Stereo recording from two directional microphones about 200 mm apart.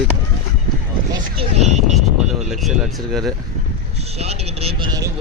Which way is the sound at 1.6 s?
35° right (ahead or behind).